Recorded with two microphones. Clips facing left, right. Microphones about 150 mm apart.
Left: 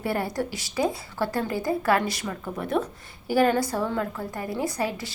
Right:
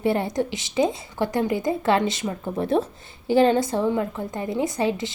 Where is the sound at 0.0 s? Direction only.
20° right (ahead or behind).